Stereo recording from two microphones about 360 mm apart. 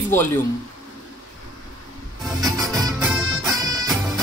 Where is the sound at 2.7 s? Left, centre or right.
Centre.